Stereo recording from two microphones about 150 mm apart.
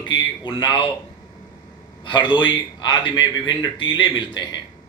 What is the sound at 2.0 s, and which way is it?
A man's voice, 30° left (ahead or behind).